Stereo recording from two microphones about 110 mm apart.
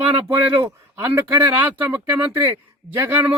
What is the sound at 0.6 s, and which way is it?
A man's voice, 20° right (ahead or behind).